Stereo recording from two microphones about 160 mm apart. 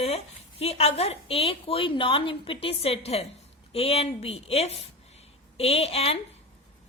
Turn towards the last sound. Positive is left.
turn(degrees=40)  # may be behind; listen again after turning